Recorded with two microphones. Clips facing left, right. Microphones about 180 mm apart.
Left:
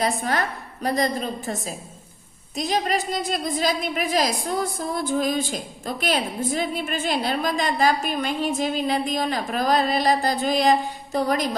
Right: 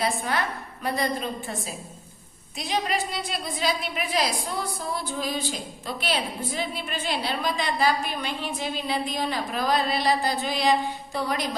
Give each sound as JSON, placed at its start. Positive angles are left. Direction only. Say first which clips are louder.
{"t": 0.0, "sound": "a woman's voice", "louder": "left 3 dB", "side_deg": 40}